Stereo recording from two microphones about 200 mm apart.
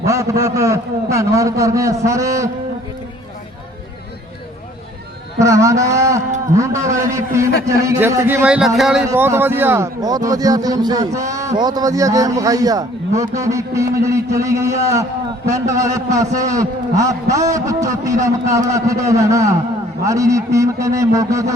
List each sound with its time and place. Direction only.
0.0 s a man's voice: 15° right (ahead or behind)
5.4 s a man's voice: 15° right (ahead or behind)